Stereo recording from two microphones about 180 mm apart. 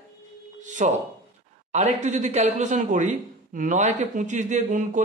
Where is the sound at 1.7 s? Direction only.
40° right (ahead or behind).